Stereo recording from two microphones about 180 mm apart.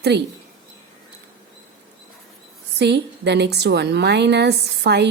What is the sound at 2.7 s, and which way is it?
A woman's voice, 70° right (ahead or behind).